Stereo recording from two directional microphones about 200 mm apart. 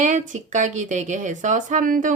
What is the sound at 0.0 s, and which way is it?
A woman's voice, 35° right (ahead or behind).